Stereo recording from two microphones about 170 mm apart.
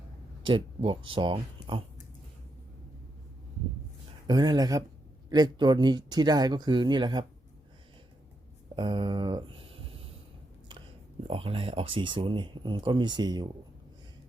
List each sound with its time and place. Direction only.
0.4 s speech: 30° right (ahead or behind)
4.3 s speech: 25° right (ahead or behind)
8.7 s a sound: 25° right (ahead or behind)
11.3 s speech: 35° right (ahead or behind)